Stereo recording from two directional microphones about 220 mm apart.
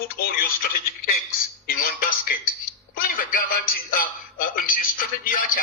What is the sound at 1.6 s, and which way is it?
Music, 45° left (ahead or behind).